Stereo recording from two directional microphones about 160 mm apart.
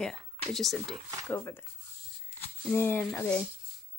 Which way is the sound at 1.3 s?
15° left (ahead or behind).